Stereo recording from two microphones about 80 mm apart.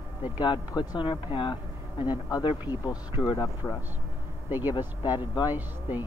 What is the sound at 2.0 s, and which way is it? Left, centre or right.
Speech, left.